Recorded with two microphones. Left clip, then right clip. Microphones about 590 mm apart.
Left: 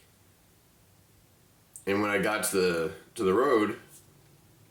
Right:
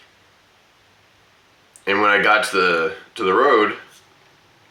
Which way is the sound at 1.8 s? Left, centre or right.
Left.